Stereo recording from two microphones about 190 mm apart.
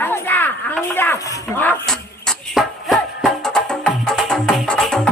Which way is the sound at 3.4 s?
5° left (ahead or behind).